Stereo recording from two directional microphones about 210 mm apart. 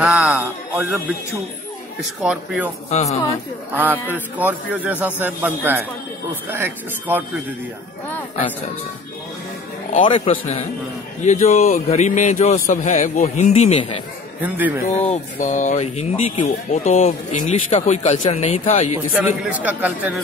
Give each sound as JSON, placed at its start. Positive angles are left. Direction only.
{"t": 0.0, "sound": "music", "side_deg": -5}
{"t": 2.0, "sound": "speech", "side_deg": -5}
{"t": 2.9, "sound": "speech", "side_deg": 30}
{"t": 3.7, "sound": "a man's voice", "side_deg": -10}
{"t": 10.0, "sound": "a man's voice", "side_deg": 25}
{"t": 19.2, "sound": "a man's voice", "side_deg": -5}